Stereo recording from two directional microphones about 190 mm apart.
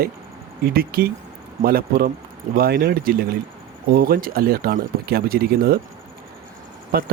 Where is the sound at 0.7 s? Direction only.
50° right (ahead or behind).